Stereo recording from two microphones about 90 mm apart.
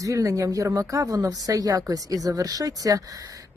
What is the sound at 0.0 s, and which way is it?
Speech, 35° right (ahead or behind).